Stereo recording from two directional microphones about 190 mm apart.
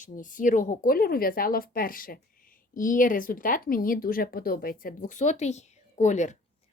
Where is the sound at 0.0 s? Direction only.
45° left (ahead or behind).